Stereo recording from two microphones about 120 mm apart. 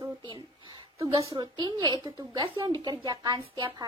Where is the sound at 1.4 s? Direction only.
35° right (ahead or behind).